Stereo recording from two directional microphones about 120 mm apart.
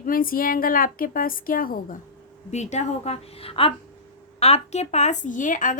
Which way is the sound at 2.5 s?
75° left (ahead or behind).